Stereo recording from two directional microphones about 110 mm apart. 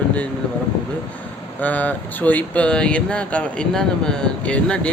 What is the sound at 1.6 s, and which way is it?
Speech, 15° left (ahead or behind).